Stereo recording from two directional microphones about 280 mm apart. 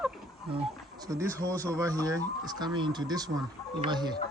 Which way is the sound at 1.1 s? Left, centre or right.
Centre.